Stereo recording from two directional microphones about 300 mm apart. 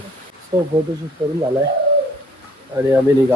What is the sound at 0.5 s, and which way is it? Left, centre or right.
Speech, centre.